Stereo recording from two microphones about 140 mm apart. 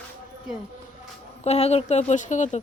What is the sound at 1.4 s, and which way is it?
Speech, 50° left (ahead or behind).